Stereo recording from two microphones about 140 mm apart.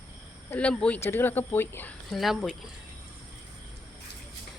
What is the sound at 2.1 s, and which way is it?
Speech, centre (ahead or behind).